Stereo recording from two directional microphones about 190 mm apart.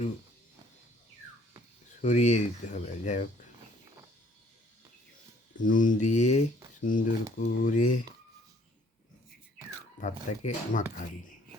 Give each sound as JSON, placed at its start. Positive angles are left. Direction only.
{"t": 2.0, "sound": "speech", "side_deg": 40}
{"t": 5.6, "sound": "speech", "side_deg": 45}
{"t": 10.0, "sound": "speech", "side_deg": 40}